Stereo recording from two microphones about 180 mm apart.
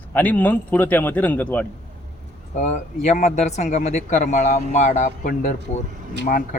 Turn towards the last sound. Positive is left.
turn(degrees=45)  # may be behind; listen again after turning